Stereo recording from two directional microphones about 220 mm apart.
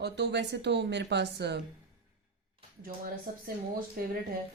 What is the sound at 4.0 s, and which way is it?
Speech, 40° right (ahead or behind).